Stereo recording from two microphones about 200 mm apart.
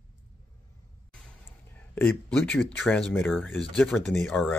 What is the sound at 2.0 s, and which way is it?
Speech, 5° left (ahead or behind).